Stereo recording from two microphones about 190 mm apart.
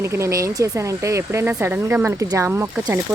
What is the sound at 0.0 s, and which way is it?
Speech, 15° right (ahead or behind).